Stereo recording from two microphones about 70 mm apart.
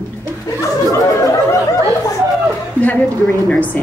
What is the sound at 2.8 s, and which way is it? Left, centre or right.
Speech, left.